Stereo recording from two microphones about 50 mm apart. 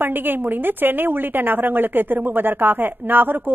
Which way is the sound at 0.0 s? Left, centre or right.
Right.